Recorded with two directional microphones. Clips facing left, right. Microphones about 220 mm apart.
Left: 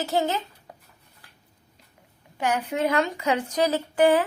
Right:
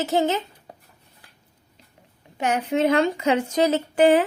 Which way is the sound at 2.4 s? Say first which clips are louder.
Right 3 dB; 25° right (ahead or behind).